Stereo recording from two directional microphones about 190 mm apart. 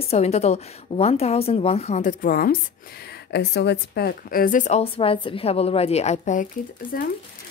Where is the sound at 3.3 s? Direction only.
60° left (ahead or behind); by 6.5 s 40° left (ahead or behind).